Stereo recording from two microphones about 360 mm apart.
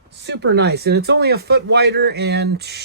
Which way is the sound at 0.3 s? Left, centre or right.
Right.